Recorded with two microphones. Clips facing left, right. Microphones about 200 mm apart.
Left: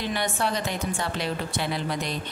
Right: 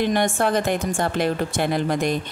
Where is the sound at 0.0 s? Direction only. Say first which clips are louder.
Right 7 dB; 50° right (ahead or behind).